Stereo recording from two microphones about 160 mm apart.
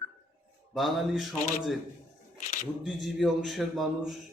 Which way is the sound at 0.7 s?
Centre (ahead or behind).